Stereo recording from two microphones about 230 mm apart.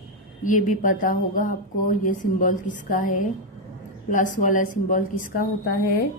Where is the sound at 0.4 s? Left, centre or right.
Left.